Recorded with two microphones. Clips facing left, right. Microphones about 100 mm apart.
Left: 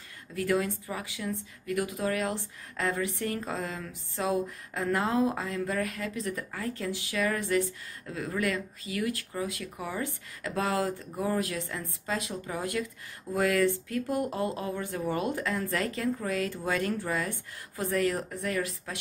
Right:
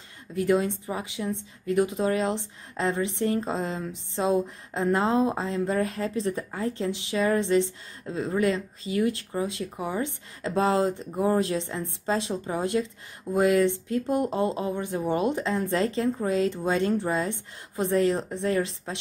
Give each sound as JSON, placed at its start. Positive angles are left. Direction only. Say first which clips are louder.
{"t": 0.3, "sound": "speech", "louder": "right 5 dB", "side_deg": -20}